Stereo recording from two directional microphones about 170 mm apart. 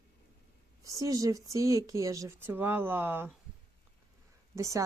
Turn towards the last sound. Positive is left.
turn(degrees=-20)  # may be behind; listen again after turning